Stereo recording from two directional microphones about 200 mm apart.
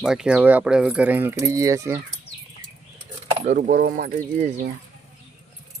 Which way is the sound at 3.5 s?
50° right (ahead or behind).